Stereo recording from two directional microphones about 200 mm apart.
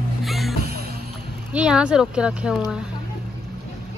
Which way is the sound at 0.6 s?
50° right (ahead or behind).